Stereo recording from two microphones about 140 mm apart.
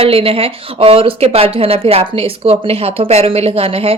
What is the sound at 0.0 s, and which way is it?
A woman's voice, 40° right (ahead or behind).